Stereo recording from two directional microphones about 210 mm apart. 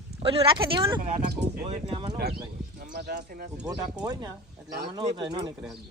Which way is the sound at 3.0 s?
50° right (ahead or behind).